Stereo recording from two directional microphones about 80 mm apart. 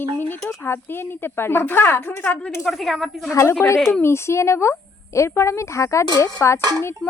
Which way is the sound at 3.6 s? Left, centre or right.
Left.